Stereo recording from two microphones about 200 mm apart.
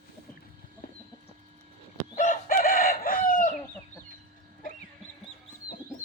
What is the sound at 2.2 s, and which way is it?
Chicken, 40° left (ahead or behind).